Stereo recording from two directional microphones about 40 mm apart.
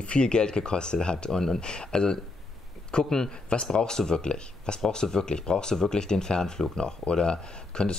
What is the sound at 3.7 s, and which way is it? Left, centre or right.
Speech, centre.